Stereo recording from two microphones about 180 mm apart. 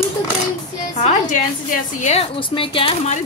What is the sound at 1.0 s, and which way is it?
Speech, 40° left (ahead or behind).